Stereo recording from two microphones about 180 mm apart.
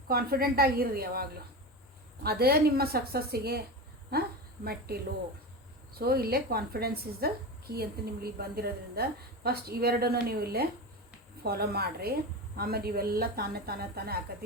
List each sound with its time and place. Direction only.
0.1 s a woman's voice: 55° right (ahead or behind)
4.6 s a woman's voice: 60° right (ahead or behind)